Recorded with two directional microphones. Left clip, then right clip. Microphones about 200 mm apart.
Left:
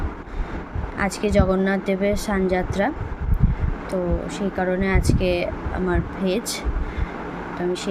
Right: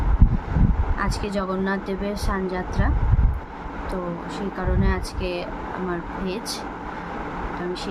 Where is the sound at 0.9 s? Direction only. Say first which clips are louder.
Left 7 dB; 15° left (ahead or behind).